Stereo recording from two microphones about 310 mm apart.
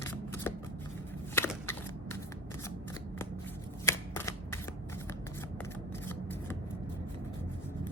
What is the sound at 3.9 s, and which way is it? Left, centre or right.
Shuffling cards, centre.